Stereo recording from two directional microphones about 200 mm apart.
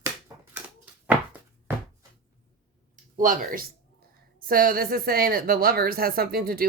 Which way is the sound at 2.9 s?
40° right (ahead or behind).